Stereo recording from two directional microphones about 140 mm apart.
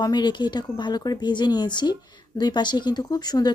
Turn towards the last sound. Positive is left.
turn(degrees=30)  # may be behind; listen again after turning